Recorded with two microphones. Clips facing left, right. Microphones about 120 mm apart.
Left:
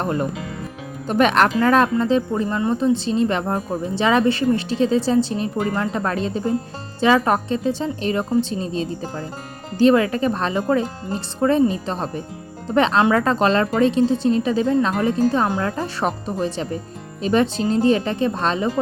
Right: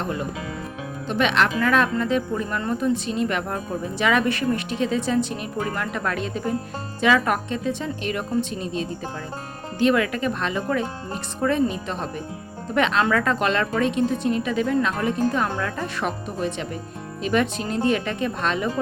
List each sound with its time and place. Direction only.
0.0 s speech: 45° left (ahead or behind)
1.5 s speech: 35° left (ahead or behind)